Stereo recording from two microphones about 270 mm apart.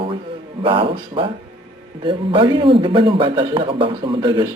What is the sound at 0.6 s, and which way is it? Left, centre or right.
A man's voice, centre.